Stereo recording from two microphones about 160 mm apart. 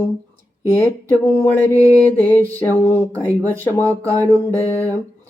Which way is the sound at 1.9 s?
10° left (ahead or behind).